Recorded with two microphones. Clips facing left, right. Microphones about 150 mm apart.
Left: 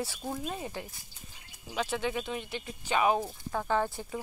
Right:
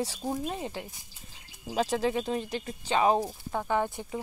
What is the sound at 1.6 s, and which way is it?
Speech, 40° right (ahead or behind).